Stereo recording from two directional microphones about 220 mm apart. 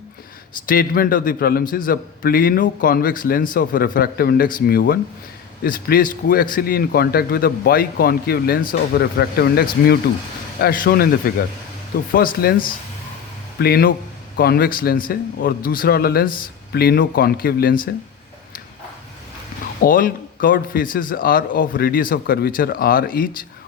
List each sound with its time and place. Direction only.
0.7 s a man's voice: 40° left (ahead or behind)
19.8 s a man's voice: 40° left (ahead or behind)